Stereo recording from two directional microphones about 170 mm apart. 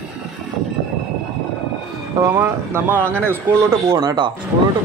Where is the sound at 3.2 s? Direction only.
15° right (ahead or behind).